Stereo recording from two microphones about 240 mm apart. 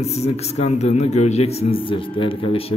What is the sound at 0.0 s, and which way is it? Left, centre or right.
A man's voice, left.